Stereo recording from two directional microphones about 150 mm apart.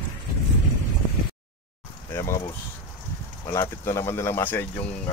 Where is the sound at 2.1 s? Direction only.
20° left (ahead or behind).